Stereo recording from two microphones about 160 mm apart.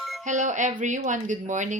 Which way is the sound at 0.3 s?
50° right (ahead or behind).